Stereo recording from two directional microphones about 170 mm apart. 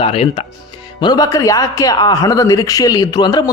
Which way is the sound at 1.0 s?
25° left (ahead or behind).